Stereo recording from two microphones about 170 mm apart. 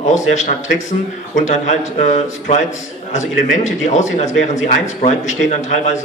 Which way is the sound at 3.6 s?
45° left (ahead or behind).